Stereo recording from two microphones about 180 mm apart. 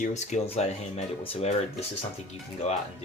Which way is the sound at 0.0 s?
40° left (ahead or behind).